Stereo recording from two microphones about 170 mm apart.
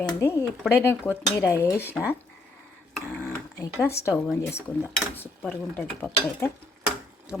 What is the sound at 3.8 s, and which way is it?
Speech, 15° left (ahead or behind).